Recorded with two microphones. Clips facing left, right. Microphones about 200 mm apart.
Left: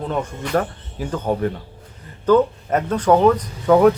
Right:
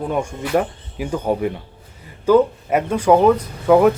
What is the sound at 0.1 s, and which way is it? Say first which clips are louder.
Speech: right 2 dB; 10° right (ahead or behind).